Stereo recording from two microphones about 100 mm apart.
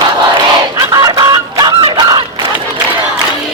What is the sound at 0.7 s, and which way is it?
Chicken, 45° right (ahead or behind).